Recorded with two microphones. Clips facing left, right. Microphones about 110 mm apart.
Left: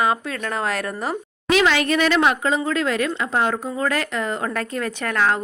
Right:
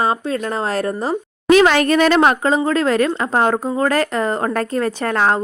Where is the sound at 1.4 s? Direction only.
45° right (ahead or behind).